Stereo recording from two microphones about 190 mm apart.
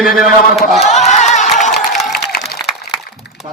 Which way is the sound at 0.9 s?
35° left (ahead or behind).